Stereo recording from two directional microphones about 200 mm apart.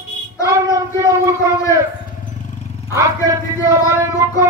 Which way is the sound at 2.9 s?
15° right (ahead or behind).